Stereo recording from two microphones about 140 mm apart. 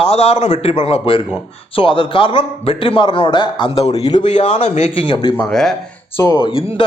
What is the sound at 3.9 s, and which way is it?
Speech, 30° left (ahead or behind).